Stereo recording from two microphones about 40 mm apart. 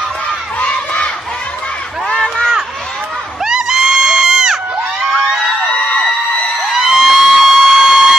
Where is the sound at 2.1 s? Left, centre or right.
Centre.